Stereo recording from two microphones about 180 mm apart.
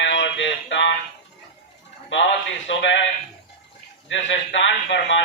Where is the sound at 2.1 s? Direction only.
90° left.